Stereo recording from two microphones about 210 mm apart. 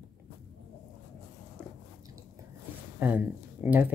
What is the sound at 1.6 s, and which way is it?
Biting, 5° right (ahead or behind).